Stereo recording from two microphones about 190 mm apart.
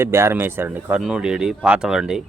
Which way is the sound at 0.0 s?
15° right (ahead or behind).